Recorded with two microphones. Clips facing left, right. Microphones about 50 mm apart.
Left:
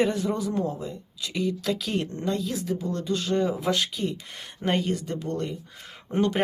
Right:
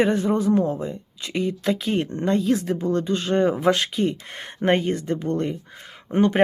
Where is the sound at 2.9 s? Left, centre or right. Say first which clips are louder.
Right 5 dB; right.